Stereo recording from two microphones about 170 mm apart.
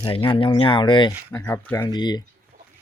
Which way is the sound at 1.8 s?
25° left (ahead or behind).